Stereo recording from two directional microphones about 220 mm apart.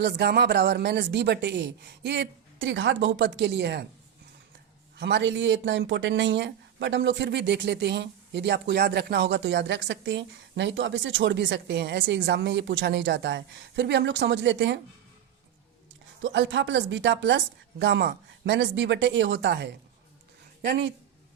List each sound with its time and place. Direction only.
0.0 s speech: 50° right (ahead or behind)
4.9 s speech: 50° right (ahead or behind)
16.2 s speech: 55° right (ahead or behind)
20.7 s speech: 55° right (ahead or behind)